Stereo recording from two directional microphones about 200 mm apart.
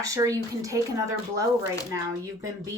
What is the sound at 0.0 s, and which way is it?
A woman's voice, 15° right (ahead or behind).